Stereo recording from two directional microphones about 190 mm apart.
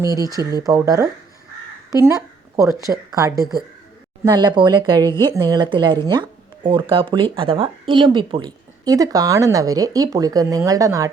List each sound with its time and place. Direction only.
0.0 s a woman's voice: 20° right (ahead or behind)